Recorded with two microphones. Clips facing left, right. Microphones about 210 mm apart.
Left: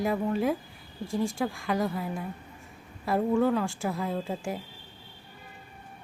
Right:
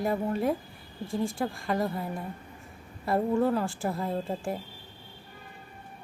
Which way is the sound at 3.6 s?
Centre (ahead or behind).